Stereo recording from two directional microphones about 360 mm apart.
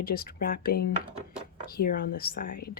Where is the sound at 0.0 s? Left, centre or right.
Left.